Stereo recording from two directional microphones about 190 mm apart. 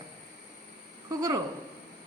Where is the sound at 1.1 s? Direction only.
20° right (ahead or behind).